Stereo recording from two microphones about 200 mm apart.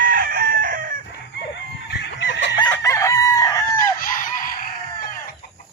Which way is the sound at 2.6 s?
15° left (ahead or behind).